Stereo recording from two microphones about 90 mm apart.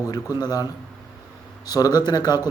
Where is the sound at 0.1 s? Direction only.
50° left (ahead or behind).